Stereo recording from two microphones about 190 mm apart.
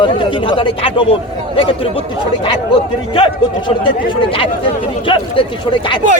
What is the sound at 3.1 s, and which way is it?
Speech, 25° left (ahead or behind).